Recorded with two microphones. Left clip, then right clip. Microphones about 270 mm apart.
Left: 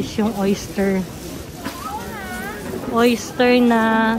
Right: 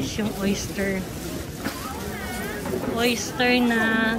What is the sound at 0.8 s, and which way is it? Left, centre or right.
Speech, left.